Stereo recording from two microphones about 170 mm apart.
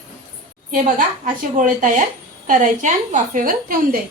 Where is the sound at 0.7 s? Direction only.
50° right (ahead or behind).